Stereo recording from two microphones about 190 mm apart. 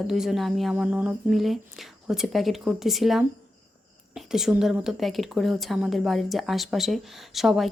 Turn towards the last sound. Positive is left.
turn(degrees=0)  # may be behind; listen again after turning